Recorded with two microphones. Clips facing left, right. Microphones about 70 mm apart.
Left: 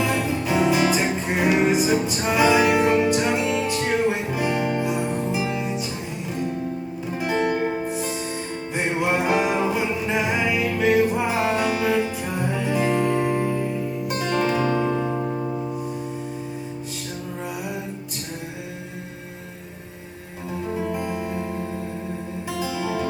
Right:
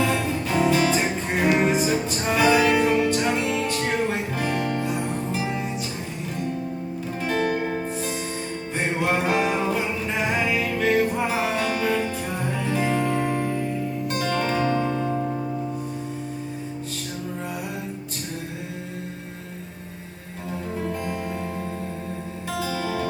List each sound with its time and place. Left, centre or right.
0.0 s music: centre
7.2 s music: centre
20.7 s music: centre
22.6 s music: centre